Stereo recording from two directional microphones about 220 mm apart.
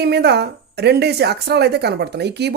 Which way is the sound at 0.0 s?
45° right (ahead or behind).